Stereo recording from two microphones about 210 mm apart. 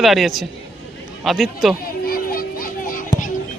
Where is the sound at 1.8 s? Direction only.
45° left (ahead or behind).